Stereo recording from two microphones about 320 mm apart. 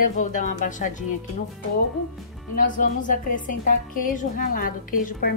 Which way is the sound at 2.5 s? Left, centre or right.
Left.